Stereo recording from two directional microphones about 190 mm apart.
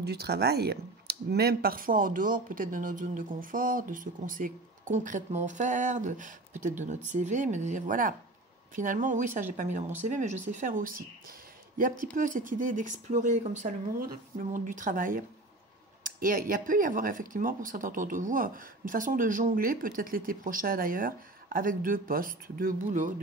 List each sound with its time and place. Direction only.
0.0 s speech: 60° right (ahead or behind)